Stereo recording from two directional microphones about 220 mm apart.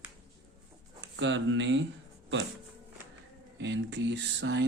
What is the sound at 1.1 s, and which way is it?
Speech, 55° right (ahead or behind).